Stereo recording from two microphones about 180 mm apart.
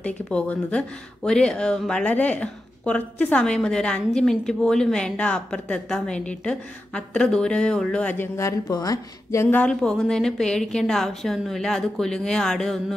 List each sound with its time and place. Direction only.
0.0 s speech: 5° left (ahead or behind)